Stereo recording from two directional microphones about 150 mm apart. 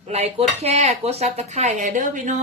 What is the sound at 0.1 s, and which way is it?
Speech, 45° right (ahead or behind).